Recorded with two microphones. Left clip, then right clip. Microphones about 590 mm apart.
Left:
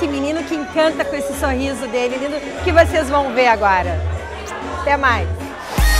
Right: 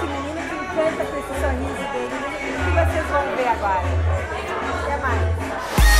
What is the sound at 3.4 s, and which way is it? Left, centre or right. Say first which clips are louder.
Speech: left 7 dB; left.